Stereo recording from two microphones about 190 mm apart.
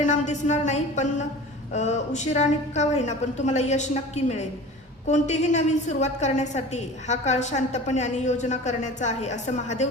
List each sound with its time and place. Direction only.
0.0 s a woman's voice: 40° left (ahead or behind)